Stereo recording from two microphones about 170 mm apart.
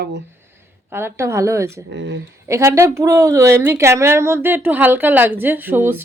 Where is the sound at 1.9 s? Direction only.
90° right.